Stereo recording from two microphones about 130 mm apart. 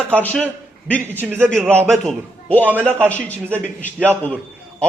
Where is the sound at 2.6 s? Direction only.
15° right (ahead or behind).